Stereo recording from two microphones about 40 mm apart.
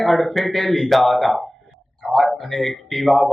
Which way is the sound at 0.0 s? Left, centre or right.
Centre.